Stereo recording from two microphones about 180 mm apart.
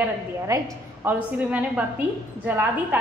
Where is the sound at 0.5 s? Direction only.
20° right (ahead or behind).